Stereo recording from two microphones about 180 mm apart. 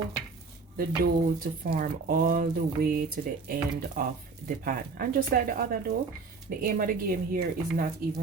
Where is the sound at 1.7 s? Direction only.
50° right (ahead or behind).